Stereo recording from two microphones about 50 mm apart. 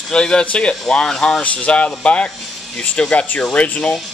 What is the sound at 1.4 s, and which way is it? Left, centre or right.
Speech, left.